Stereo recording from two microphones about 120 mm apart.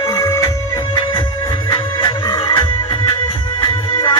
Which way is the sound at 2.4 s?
45° left (ahead or behind).